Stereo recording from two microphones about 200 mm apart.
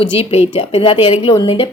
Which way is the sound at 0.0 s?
30° left (ahead or behind).